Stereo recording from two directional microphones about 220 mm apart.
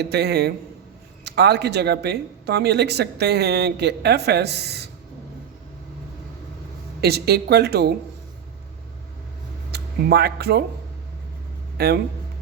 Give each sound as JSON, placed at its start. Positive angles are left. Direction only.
{"t": 0.0, "sound": "speech", "side_deg": -50}
{"t": 7.0, "sound": "speech", "side_deg": -45}
{"t": 9.7, "sound": "speech", "side_deg": -45}
{"t": 11.8, "sound": "speech", "side_deg": -45}